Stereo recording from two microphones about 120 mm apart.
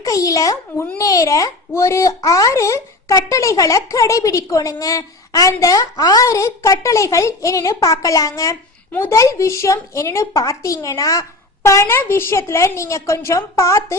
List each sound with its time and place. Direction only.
0.0 s a child's voice: 30° left (ahead or behind)